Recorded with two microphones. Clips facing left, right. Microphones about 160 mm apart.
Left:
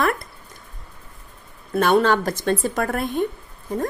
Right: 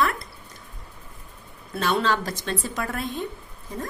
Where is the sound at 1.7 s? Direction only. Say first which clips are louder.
Left 7 dB; 50° left (ahead or behind).